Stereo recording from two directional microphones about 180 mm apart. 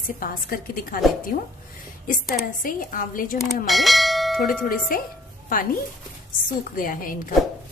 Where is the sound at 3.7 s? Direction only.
Centre (ahead or behind).